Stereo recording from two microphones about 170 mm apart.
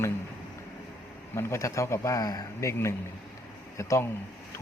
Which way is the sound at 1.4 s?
15° left (ahead or behind).